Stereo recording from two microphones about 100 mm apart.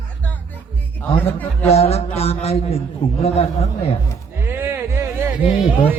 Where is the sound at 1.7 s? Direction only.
90° left.